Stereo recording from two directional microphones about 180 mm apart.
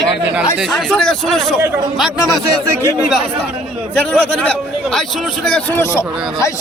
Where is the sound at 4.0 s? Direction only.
5° left (ahead or behind).